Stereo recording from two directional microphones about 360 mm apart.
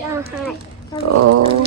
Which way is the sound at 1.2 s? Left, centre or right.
Right.